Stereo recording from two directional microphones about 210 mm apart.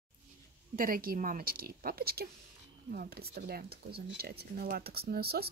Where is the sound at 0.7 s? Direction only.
45° right (ahead or behind).